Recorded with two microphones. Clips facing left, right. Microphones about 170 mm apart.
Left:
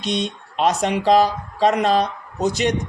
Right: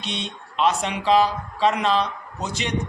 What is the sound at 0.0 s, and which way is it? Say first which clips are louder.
A man's voice: left 8 dB; 40° left (ahead or behind).